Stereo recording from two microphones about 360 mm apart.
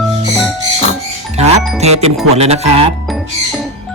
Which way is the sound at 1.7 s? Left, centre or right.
Centre.